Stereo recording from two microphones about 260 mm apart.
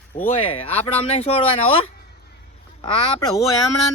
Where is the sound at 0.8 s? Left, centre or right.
Left.